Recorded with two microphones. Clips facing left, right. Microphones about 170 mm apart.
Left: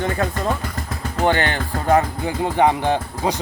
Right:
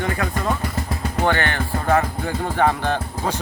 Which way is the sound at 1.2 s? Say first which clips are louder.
Left 3 dB; 20° left (ahead or behind).